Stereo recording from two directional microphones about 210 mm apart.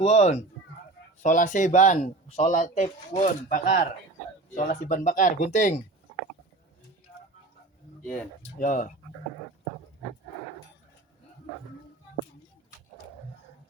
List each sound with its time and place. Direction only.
0.0 s speech: 30° left (ahead or behind)
8.0 s speech: 5° left (ahead or behind)
8.5 s speech: 40° left (ahead or behind)